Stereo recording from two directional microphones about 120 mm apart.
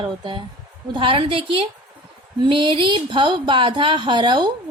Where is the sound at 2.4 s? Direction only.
45° right (ahead or behind).